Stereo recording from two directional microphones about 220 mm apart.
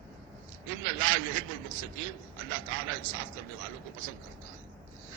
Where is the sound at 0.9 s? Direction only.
65° right (ahead or behind).